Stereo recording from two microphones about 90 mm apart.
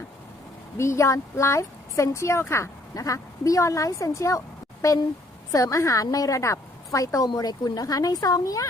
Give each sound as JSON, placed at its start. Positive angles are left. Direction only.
{"t": 0.8, "sound": "a woman's voice", "side_deg": 30}